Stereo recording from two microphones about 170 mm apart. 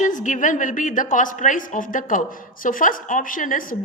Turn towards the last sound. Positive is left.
turn(degrees=50)  # may be behind; listen again after turning